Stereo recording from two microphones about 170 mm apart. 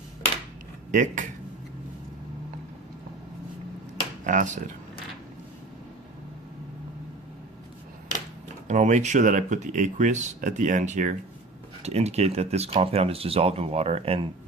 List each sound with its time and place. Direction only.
0.9 s speech: 50° right (ahead or behind)
4.2 s speech: 50° right (ahead or behind)
8.6 s speech: 45° right (ahead or behind)